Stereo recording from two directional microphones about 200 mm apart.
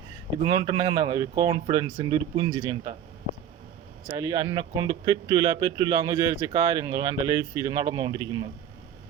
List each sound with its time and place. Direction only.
0.4 s speech: 20° right (ahead or behind)
4.2 s speech: 20° right (ahead or behind)